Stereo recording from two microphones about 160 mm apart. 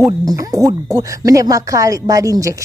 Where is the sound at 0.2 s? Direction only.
20° right (ahead or behind).